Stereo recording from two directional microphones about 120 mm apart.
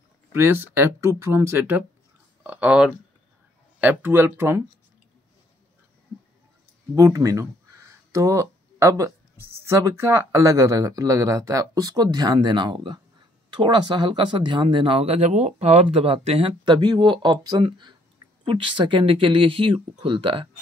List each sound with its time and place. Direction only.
0.3 s speech: 20° right (ahead or behind)
7.0 s speech: 25° right (ahead or behind); by 20.4 s 45° right (ahead or behind)